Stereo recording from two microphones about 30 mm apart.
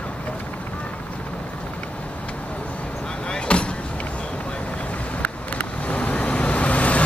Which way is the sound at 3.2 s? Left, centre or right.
Left.